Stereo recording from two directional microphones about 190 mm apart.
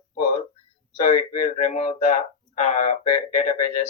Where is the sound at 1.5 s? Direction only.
35° left (ahead or behind).